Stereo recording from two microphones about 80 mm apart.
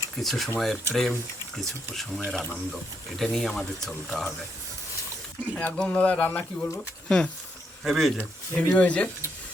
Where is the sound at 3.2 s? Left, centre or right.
Centre.